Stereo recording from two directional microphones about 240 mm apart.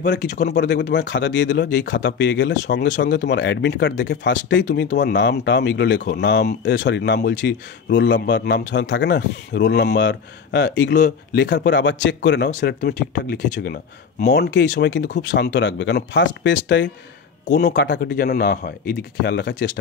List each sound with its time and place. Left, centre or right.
0.0 s speech: left